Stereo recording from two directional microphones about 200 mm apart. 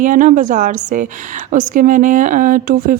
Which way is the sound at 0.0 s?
40° right (ahead or behind).